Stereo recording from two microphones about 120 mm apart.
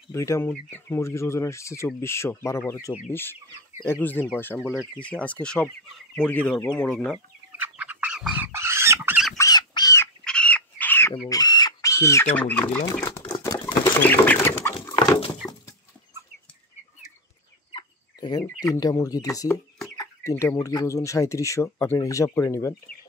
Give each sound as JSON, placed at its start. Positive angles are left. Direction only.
{"t": 0.1, "sound": "speech", "side_deg": 25}
{"t": 3.1, "sound": "chicken", "side_deg": 20}
{"t": 7.5, "sound": "frog", "side_deg": -15}
{"t": 8.5, "sound": "pig", "side_deg": -20}
{"t": 9.4, "sound": "squawk", "side_deg": 35}
{"t": 10.2, "sound": "fowl", "side_deg": 10}
{"t": 11.2, "sound": "chicken", "side_deg": 30}
{"t": 12.4, "sound": "chicken", "side_deg": 15}
{"t": 17.6, "sound": "chicken", "side_deg": 40}
{"t": 18.6, "sound": "speech", "side_deg": 30}